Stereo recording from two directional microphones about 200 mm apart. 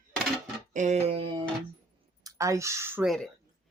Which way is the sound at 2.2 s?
15° right (ahead or behind).